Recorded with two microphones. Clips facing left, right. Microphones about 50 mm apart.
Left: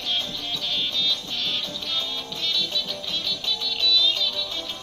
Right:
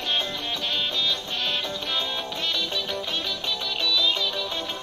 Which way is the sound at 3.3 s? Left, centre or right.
Right.